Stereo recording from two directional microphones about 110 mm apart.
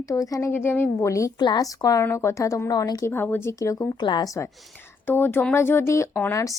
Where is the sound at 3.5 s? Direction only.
30° left (ahead or behind).